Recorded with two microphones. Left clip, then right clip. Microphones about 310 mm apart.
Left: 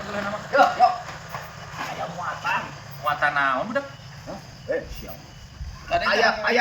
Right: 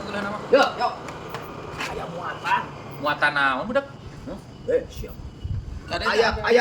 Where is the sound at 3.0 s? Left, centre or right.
Centre.